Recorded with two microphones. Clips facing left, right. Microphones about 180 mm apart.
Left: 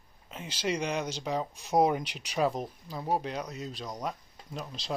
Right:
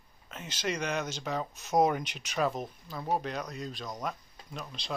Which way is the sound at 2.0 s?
30° left (ahead or behind).